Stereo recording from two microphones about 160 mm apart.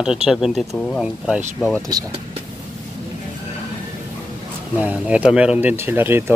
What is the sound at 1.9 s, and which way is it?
Speech, 25° right (ahead or behind).